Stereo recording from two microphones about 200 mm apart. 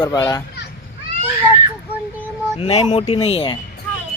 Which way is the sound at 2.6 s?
30° left (ahead or behind).